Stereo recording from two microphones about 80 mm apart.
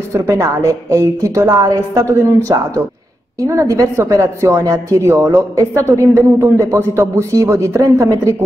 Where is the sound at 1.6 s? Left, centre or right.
Right.